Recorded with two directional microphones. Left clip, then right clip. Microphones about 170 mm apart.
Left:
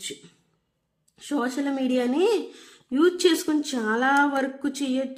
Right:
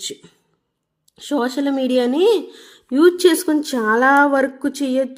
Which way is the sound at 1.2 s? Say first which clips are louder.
Right 7 dB; 35° right (ahead or behind).